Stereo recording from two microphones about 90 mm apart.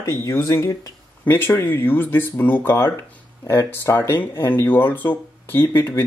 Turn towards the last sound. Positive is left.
turn(degrees=25)  # may be behind; listen again after turning